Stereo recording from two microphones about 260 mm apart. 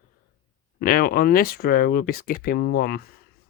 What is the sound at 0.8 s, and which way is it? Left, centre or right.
Speech, left.